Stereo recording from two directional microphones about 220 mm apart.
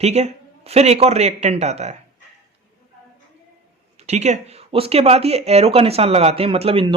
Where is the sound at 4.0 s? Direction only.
30° right (ahead or behind).